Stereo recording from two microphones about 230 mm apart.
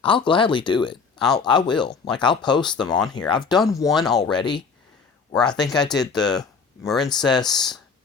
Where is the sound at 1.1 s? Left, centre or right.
Centre.